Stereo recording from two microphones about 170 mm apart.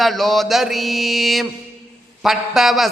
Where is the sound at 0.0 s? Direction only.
Centre (ahead or behind).